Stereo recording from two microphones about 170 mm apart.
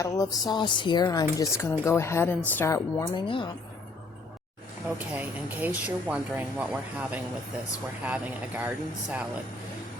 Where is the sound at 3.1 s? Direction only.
30° left (ahead or behind).